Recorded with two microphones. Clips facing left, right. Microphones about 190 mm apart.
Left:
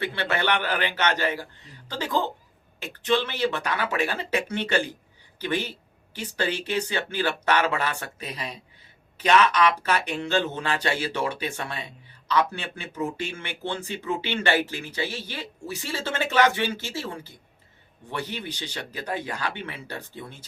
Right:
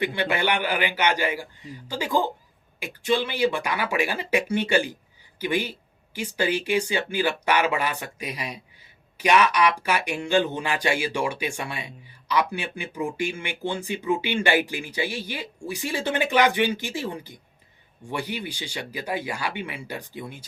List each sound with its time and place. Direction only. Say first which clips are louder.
0.0 s speech: right 2 dB; 15° right (ahead or behind)